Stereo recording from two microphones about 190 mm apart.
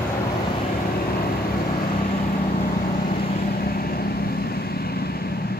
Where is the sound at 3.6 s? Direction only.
50° left (ahead or behind).